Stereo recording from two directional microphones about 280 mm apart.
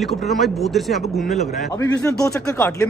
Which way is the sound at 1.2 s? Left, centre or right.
Left.